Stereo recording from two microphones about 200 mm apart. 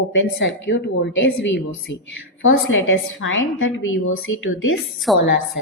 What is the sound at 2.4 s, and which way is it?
A woman's voice, 80° left.